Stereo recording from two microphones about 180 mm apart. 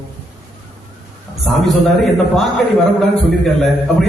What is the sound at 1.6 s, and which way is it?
A man's voice, centre (ahead or behind).